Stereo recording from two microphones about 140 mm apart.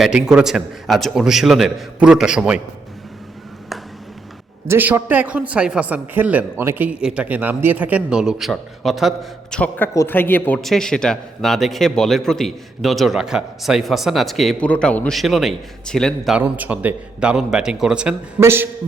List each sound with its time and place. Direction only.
0.0 s a man's voice: 5° right (ahead or behind)
4.7 s a man's voice: 15° right (ahead or behind)
9.6 s a man's voice: 15° left (ahead or behind)
16.4 s a man's voice: 10° right (ahead or behind)
18.3 s a man's voice: 15° right (ahead or behind)